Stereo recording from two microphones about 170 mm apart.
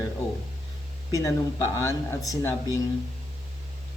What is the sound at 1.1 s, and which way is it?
Speech, 15° left (ahead or behind).